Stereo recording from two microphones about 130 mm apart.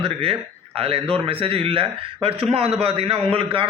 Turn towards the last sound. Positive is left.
turn(degrees=-45)  # may be behind; listen again after turning